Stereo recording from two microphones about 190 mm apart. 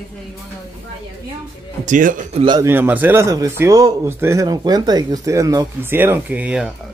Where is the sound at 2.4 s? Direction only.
25° right (ahead or behind).